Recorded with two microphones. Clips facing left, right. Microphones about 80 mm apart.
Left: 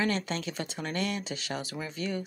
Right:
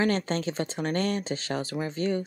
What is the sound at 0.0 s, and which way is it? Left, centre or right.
Speech, right.